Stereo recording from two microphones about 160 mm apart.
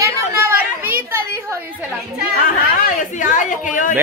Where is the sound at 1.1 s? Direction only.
15° right (ahead or behind).